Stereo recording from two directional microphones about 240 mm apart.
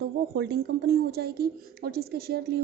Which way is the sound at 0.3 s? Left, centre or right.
Right.